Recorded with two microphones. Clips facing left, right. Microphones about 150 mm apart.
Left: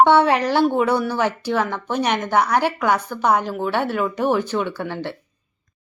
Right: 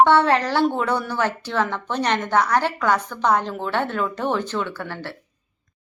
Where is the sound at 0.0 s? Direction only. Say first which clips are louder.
Left 1 dB; 15° left (ahead or behind).